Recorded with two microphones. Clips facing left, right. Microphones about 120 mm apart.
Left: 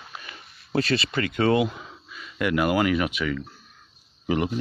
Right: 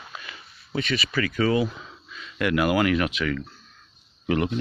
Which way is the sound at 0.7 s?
35° left (ahead or behind).